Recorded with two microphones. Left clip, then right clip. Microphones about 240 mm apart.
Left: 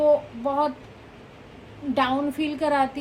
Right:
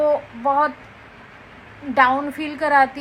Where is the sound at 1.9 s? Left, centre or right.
Centre.